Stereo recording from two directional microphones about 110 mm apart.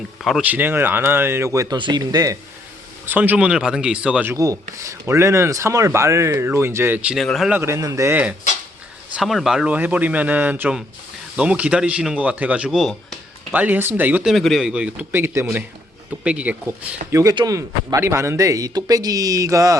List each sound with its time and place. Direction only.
0.4 s speech: 15° right (ahead or behind)
1.7 s speech: 40° right (ahead or behind)
3.1 s speech: 15° right (ahead or behind)
4.3 s speech: 30° right (ahead or behind)
7.3 s a man's voice: centre (ahead or behind)
7.5 s speech: 25° right (ahead or behind)
8.1 s speech: 15° right (ahead or behind)
9.1 s speech: centre (ahead or behind)
14.3 s speech: centre (ahead or behind); by 15.4 s 25° right (ahead or behind)
16.2 s speech: 10° right (ahead or behind); by 19.8 s 30° right (ahead or behind)